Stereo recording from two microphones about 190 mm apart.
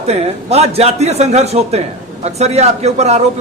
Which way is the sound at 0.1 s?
35° right (ahead or behind).